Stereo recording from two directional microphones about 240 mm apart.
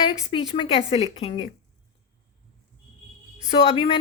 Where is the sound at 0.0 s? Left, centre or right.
Left.